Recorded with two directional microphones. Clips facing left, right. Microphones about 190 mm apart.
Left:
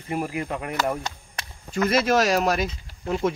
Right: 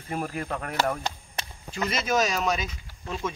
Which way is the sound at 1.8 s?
65° left (ahead or behind).